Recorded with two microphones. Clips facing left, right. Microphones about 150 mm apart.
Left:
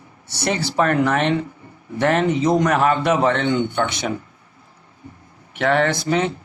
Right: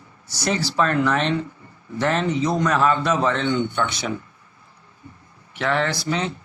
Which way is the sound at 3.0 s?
60° left (ahead or behind).